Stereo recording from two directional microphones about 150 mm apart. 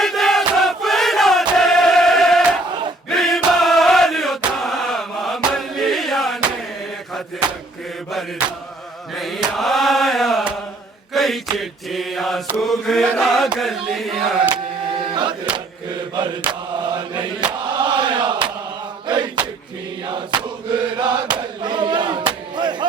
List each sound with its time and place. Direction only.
0.0 s crowd: centre (ahead or behind)
3.1 s chant: centre (ahead or behind)
9.1 s chant: centre (ahead or behind)
11.1 s mantra: centre (ahead or behind)
12.5 s chant: centre (ahead or behind)
14.5 s printer: 30° right (ahead or behind)
16.9 s chant: 30° right (ahead or behind)
21.6 s battle cry: 30° right (ahead or behind)
22.5 s a sound: 30° right (ahead or behind)